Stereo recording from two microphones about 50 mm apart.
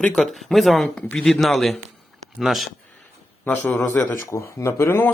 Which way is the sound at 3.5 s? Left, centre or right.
Left.